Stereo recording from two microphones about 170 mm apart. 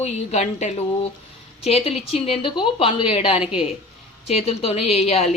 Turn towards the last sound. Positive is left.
turn(degrees=40)  # may be behind; listen again after turning